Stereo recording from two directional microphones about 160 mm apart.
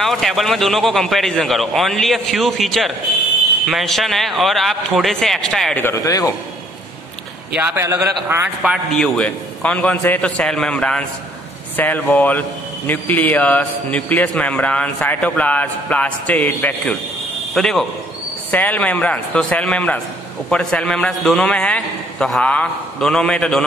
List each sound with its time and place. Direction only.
0.0 s a man's voice: centre (ahead or behind)
5.8 s speech: 20° left (ahead or behind)
7.5 s a man's voice: 15° right (ahead or behind)
8.9 s a man's voice: 5° left (ahead or behind)